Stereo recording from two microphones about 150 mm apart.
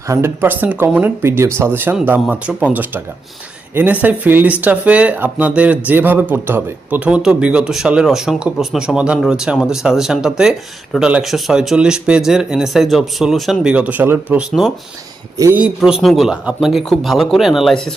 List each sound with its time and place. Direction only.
0.1 s speech: 15° right (ahead or behind)
4.0 s speech: 10° right (ahead or behind)
15.4 s speech: 15° right (ahead or behind)
15.6 s speech: 5° right (ahead or behind)